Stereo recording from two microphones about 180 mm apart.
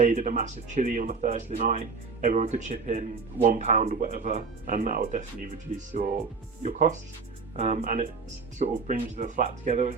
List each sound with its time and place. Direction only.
0.0 s speech: 45° right (ahead or behind)